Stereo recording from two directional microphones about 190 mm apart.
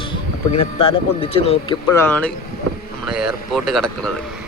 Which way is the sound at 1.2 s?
30° left (ahead or behind).